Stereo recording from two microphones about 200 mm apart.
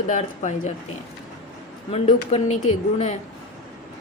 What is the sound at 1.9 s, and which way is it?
Speech, 30° left (ahead or behind).